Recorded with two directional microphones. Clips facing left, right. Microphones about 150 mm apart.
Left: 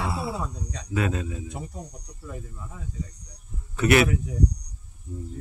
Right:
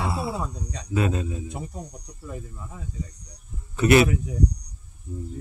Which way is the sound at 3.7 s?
25° right (ahead or behind).